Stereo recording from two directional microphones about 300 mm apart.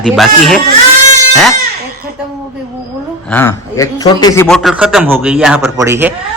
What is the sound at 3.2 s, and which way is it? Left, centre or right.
A man's voice, centre.